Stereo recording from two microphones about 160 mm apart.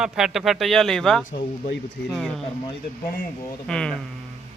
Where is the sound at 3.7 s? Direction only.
5° left (ahead or behind).